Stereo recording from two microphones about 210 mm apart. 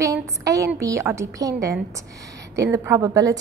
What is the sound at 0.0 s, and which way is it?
A woman's voice, 15° right (ahead or behind).